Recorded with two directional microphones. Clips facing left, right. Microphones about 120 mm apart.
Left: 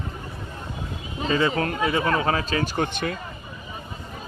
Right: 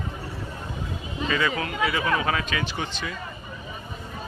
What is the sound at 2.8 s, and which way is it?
Speech, 55° left (ahead or behind).